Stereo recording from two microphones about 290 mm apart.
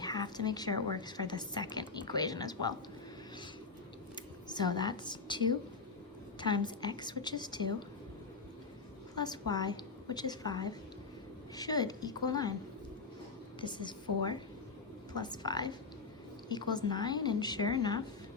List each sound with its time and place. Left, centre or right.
0.0 s a woman's voice: centre
4.1 s a woman's voice: centre
9.1 s a woman's voice: centre
13.6 s a woman's voice: centre